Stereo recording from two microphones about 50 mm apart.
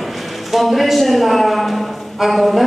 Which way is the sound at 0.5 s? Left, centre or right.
Centre.